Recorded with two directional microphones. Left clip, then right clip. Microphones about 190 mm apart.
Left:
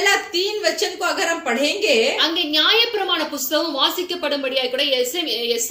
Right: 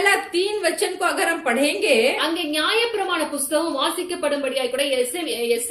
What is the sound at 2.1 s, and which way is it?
A woman's voice, 15° left (ahead or behind).